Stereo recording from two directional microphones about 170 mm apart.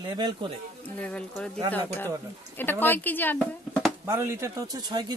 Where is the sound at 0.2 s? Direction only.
25° right (ahead or behind).